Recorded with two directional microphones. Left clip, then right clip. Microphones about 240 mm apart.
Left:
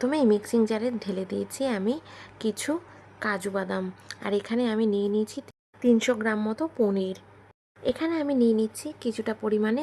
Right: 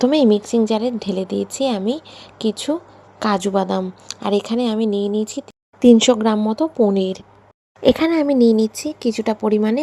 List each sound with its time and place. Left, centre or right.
0.0 s a woman's voice: centre
3.2 s a woman's voice: centre
5.8 s a woman's voice: right